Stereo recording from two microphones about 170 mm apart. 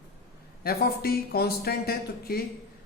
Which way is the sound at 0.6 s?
65° left (ahead or behind).